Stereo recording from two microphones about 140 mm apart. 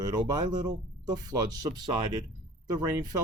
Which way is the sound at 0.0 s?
25° right (ahead or behind).